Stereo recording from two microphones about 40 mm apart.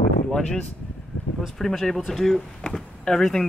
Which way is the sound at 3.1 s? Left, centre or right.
Centre.